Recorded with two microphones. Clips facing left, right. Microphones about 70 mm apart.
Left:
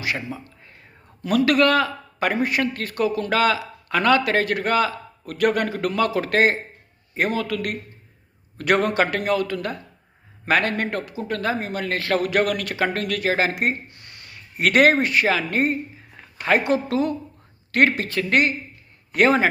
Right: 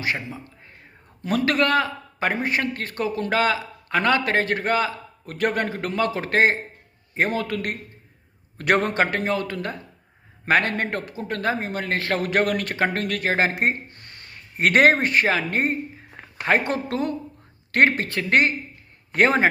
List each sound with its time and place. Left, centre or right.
1.2 s a man's voice: right